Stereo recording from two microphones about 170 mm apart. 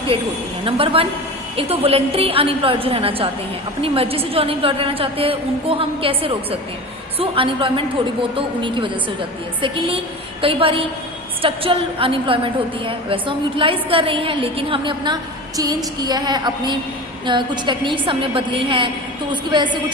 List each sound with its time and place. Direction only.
0.6 s a woman's voice: 35° right (ahead or behind)